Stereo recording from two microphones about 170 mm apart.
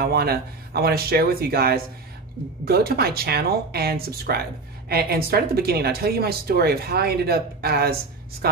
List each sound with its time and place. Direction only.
0.0 s speech: 65° right (ahead or behind)